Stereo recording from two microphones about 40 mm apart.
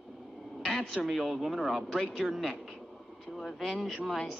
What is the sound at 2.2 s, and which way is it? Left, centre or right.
Speech, centre.